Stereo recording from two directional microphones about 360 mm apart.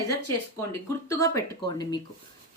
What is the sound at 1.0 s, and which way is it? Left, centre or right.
Speech, centre.